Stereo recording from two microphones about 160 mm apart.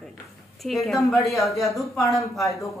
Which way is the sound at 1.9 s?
20° left (ahead or behind).